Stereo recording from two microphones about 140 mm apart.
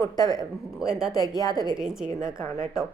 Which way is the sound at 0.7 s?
5° right (ahead or behind).